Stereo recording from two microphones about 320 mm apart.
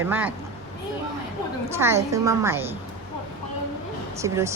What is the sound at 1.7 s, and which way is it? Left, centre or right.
A woman's voice, centre.